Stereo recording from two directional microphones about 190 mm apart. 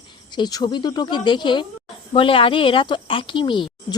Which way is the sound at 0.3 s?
20° left (ahead or behind).